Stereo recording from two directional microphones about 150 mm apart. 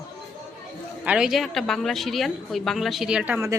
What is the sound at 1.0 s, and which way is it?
A woman's voice, 5° right (ahead or behind).